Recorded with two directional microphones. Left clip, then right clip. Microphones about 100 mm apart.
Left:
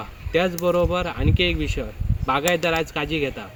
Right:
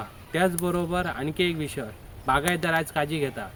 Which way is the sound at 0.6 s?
30° right (ahead or behind).